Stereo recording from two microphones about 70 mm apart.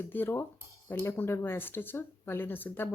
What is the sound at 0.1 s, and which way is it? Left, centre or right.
Speech, left.